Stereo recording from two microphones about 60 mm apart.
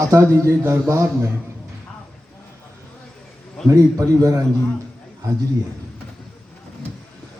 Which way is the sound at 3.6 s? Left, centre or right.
Right.